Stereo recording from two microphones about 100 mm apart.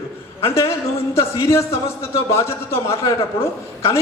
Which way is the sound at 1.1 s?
30° left (ahead or behind).